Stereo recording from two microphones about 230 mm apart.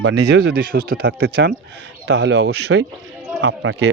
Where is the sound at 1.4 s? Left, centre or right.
Right.